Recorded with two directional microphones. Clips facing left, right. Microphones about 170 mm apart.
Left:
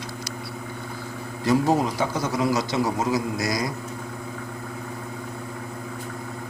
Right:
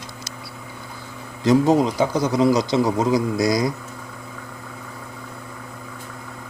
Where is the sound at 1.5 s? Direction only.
20° right (ahead or behind).